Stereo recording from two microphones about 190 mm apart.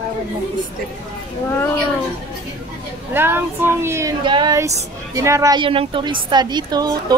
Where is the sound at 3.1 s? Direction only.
10° right (ahead or behind).